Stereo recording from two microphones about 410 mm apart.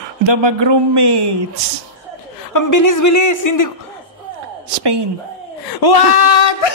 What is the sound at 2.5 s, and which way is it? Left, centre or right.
A woman's voice, left.